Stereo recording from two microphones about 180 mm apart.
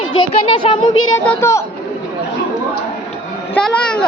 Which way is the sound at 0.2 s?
30° left (ahead or behind).